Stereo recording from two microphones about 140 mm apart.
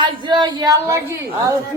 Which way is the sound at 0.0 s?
35° right (ahead or behind).